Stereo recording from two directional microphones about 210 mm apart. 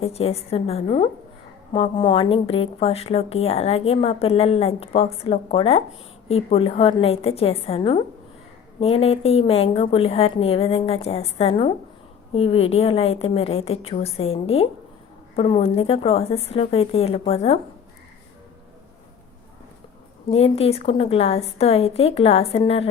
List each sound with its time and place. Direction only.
0.0 s a woman's voice: 30° left (ahead or behind)
20.3 s a woman's voice: 30° left (ahead or behind)